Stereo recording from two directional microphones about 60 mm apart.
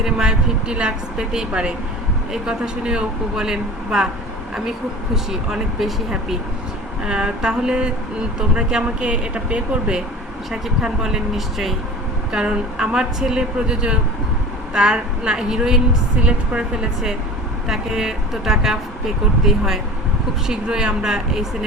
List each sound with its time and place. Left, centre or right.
0.0 s a woman's voice: centre
5.1 s a woman's voice: centre
12.3 s a woman's voice: centre